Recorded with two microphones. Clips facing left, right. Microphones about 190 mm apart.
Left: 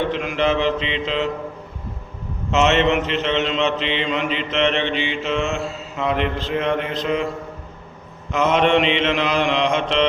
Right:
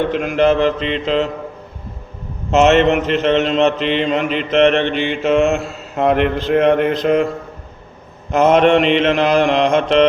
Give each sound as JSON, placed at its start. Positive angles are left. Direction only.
{"t": 0.1, "sound": "mantra", "side_deg": -45}
{"t": 2.5, "sound": "mantra", "side_deg": -45}
{"t": 8.3, "sound": "mantra", "side_deg": -45}